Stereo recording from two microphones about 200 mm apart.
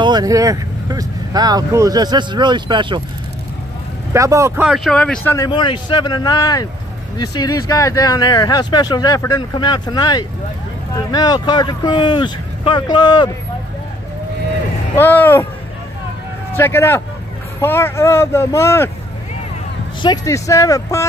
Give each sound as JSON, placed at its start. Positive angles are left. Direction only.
{"t": 0.0, "sound": "speech", "side_deg": -20}
{"t": 4.1, "sound": "speech", "side_deg": -15}
{"t": 4.6, "sound": "speech", "side_deg": 0}
{"t": 5.3, "sound": "speech", "side_deg": 20}
{"t": 15.0, "sound": "speech", "side_deg": 10}
{"t": 16.5, "sound": "speech", "side_deg": 10}
{"t": 20.0, "sound": "speech", "side_deg": 20}